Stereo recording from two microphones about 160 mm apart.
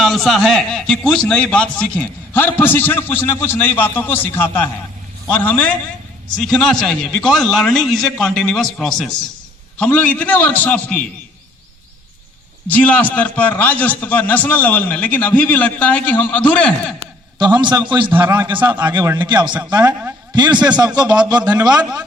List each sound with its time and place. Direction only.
0.0 s a man's voice: centre (ahead or behind)
12.6 s a man's voice: 10° left (ahead or behind)
17.4 s a man's voice: 25° right (ahead or behind)
18.1 s a man's voice: 15° right (ahead or behind)
19.8 s a man's voice: 10° right (ahead or behind)
20.8 s a man's voice: 25° right (ahead or behind)